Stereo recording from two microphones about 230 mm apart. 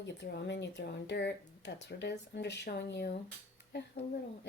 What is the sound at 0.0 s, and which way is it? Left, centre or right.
Speech, left.